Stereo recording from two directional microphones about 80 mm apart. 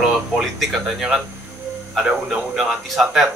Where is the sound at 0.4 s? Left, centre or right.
Centre.